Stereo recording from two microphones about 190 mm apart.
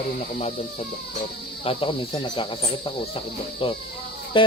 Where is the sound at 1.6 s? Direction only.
30° left (ahead or behind).